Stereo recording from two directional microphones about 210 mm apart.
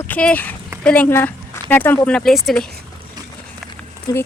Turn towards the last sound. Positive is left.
turn(degrees=15)  # may be behind; listen again after turning